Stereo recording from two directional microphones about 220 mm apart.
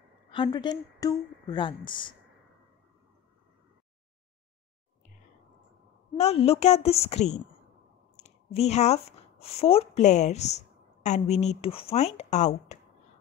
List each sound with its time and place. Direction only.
0.3 s a woman's voice: 20° left (ahead or behind)
6.1 s a woman's voice: 30° left (ahead or behind)